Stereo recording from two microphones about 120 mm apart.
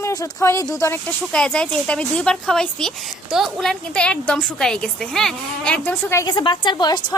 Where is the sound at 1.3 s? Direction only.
5° left (ahead or behind).